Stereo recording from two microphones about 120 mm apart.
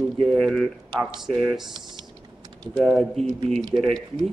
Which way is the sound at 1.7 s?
40° right (ahead or behind).